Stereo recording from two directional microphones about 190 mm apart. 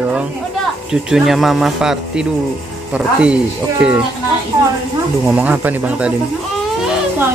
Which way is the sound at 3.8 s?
5° right (ahead or behind).